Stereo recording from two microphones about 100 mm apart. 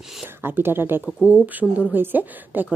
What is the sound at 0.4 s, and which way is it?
Speech, 20° right (ahead or behind).